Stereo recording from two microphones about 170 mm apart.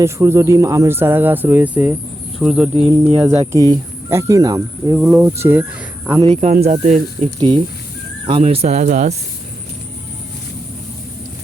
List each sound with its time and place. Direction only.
0.0 s speech: 15° right (ahead or behind)
2.9 s speech: 15° right (ahead or behind)
4.9 s speech: 10° right (ahead or behind)
6.2 s speech: 35° right (ahead or behind)
7.3 s speech: 25° right (ahead or behind); by 9.1 s 45° right (ahead or behind)